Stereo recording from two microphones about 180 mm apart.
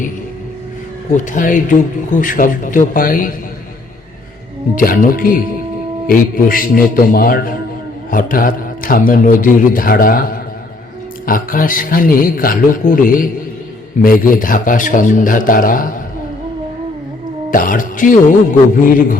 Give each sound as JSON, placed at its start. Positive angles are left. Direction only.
{"t": 1.1, "sound": "a man's voice", "side_deg": 45}
{"t": 4.7, "sound": "a man's voice", "side_deg": 50}
{"t": 17.5, "sound": "a man's voice", "side_deg": 50}